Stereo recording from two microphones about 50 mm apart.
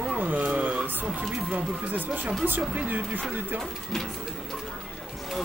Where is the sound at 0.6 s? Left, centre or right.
Right.